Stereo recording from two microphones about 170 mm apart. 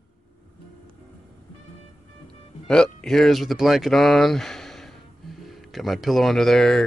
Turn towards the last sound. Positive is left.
turn(degrees=5)  # may be behind; listen again after turning